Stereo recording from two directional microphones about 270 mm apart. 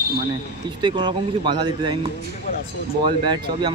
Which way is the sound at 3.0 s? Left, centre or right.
Centre.